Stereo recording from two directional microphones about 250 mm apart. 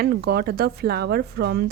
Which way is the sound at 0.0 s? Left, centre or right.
Right.